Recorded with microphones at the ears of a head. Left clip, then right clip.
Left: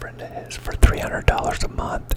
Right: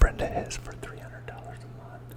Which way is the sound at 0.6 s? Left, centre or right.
Left.